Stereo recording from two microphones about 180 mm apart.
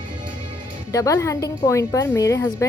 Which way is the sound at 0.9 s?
20° left (ahead or behind).